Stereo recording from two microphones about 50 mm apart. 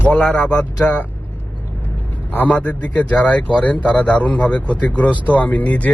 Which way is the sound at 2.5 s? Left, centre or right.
Left.